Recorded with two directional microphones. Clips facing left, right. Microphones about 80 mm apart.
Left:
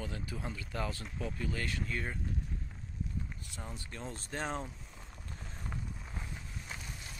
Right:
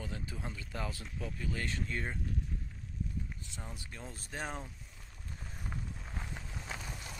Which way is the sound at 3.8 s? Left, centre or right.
Centre.